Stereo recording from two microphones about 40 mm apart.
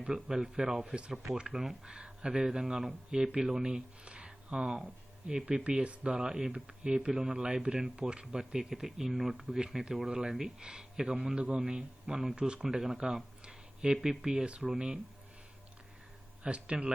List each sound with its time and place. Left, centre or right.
0.0 s speech: centre
0.9 s speech: right
4.0 s a sound: right
4.7 s speech: right
6.1 s speech: centre
8.4 s speech: centre
12.4 s speech: right
12.8 s speech: centre
14.4 s speech: right
16.4 s speech: right